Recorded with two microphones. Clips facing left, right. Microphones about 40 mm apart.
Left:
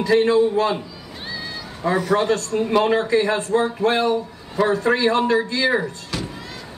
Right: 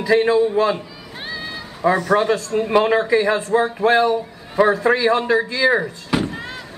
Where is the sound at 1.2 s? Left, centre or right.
Right.